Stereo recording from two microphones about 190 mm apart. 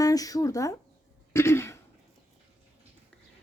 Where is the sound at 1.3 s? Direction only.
15° left (ahead or behind).